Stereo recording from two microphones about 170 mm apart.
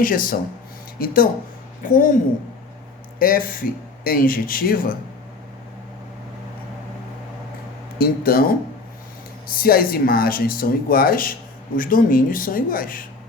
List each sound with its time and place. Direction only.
0.0 s speech: 55° left (ahead or behind)
3.2 s speech: 55° left (ahead or behind)
7.9 s speech: 60° left (ahead or behind)
9.6 s speech: 60° left (ahead or behind)